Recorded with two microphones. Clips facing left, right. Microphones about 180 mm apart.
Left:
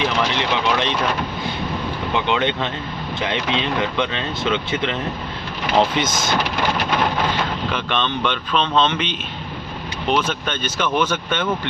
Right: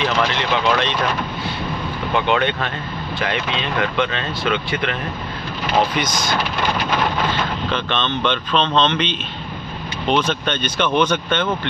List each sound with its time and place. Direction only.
0.0 s speech: 15° left (ahead or behind)
2.3 s speech: 20° left (ahead or behind)
5.9 s speech: 25° left (ahead or behind)
7.7 s speech: 10° left (ahead or behind)